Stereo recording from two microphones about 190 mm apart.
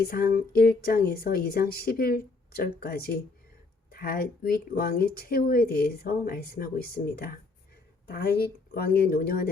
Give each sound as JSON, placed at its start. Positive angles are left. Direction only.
{"t": 0.0, "sound": "speech", "side_deg": 55}